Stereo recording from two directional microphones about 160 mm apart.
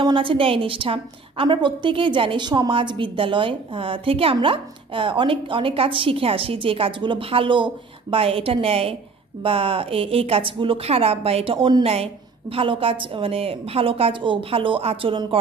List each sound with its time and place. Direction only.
0.0 s a woman's voice: 30° right (ahead or behind)